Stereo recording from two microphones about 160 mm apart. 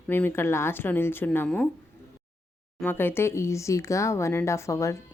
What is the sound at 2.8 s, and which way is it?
A woman's voice, 15° left (ahead or behind).